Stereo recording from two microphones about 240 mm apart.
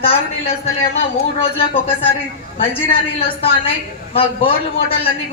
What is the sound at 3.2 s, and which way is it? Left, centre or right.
A man's voice, left.